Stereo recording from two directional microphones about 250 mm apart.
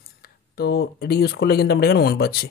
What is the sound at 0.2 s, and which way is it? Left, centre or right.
Speech, left.